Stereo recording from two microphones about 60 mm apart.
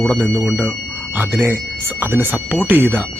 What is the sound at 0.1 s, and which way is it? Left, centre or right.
Speech, right.